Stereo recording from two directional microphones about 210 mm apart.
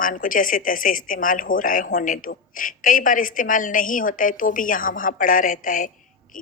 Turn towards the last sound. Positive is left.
turn(degrees=40)  # may be behind; listen again after turning